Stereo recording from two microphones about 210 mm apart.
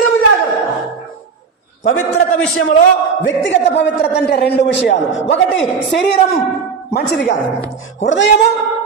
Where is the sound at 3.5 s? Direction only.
55° left (ahead or behind).